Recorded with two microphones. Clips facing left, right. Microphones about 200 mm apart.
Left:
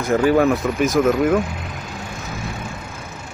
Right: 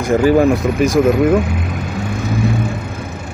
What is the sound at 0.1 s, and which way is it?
Speech, 5° right (ahead or behind).